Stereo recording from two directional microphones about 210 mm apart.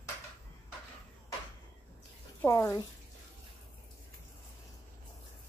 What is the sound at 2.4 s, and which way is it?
Speech, 10° left (ahead or behind).